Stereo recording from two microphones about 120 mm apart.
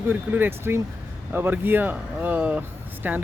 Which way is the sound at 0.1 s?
15° right (ahead or behind).